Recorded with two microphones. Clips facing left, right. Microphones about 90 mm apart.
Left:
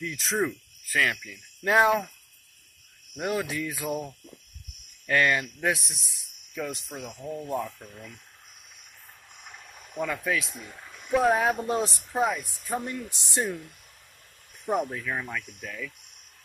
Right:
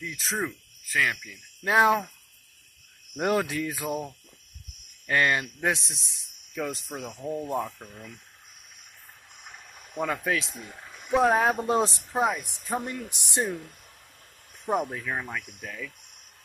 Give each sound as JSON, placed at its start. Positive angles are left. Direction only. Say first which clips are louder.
{"t": 0.0, "sound": "speech", "louder": "left 3 dB", "side_deg": -5}
{"t": 1.2, "sound": "speech", "louder": "left 3 dB", "side_deg": -15}
{"t": 1.9, "sound": "cricket", "louder": "right 1 dB", "side_deg": -15}
{"t": 3.2, "sound": "speech", "louder": "right 4 dB", "side_deg": -55}
{"t": 3.4, "sound": "music", "louder": "right 1 dB", "side_deg": -35}
{"t": 5.0, "sound": "speech", "louder": "left 1 dB", "side_deg": -25}
{"t": 6.6, "sound": "music", "louder": "right 2 dB", "side_deg": -35}
{"t": 7.2, "sound": "speech", "louder": "right 2 dB", "side_deg": -30}
{"t": 9.9, "sound": "speech", "louder": "right 1 dB", "side_deg": -30}
{"t": 10.5, "sound": "speech", "louder": "right 1 dB", "side_deg": -5}
{"t": 11.1, "sound": "speech", "louder": "right 1 dB", "side_deg": -25}